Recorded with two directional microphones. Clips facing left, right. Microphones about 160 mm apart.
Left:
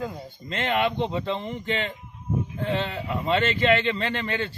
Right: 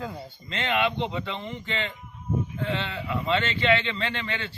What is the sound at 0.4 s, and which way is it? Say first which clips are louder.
A man's voice: left 2 dB; 45° left (ahead or behind).